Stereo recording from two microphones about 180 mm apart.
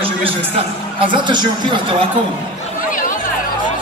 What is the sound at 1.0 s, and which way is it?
Speech, 25° right (ahead or behind).